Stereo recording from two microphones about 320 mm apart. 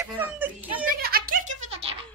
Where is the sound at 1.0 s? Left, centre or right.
Right.